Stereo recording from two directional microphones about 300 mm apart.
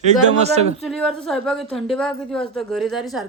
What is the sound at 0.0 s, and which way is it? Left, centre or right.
Speech, right.